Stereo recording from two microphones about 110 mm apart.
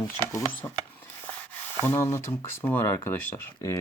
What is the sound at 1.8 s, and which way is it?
Speech, 25° left (ahead or behind).